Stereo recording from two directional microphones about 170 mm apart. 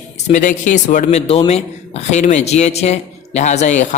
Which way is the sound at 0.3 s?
45° left (ahead or behind).